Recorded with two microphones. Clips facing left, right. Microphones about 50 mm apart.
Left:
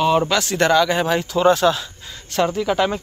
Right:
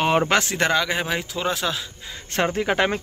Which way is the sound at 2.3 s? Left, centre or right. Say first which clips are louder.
Left 3 dB; right.